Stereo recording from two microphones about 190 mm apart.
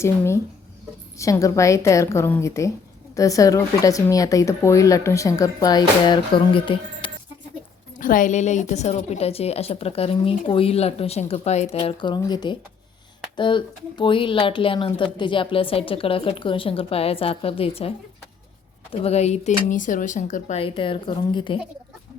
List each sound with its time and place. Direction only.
1.2 s a woman's voice: 15° left (ahead or behind)
7.9 s a woman's voice: 45° left (ahead or behind)
19.0 s a woman's voice: 35° left (ahead or behind)
20.6 s a woman's voice: 30° left (ahead or behind)